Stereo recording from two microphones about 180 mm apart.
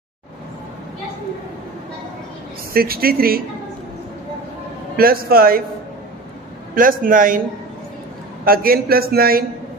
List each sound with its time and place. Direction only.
2.7 s a man's voice: 55° right (ahead or behind)
4.9 s a man's voice: 55° right (ahead or behind)
6.7 s a man's voice: 50° right (ahead or behind)
8.5 s a man's voice: 55° right (ahead or behind)